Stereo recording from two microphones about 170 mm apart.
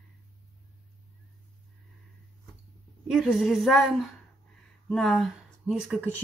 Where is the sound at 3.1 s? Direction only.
Centre (ahead or behind).